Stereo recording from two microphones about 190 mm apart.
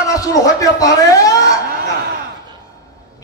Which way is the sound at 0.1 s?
20° left (ahead or behind).